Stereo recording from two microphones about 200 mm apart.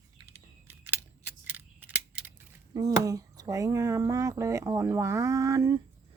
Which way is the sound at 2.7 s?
20° right (ahead or behind).